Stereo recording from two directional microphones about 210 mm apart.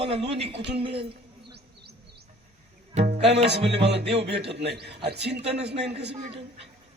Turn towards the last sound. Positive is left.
turn(degrees=-25)  # may be behind; listen again after turning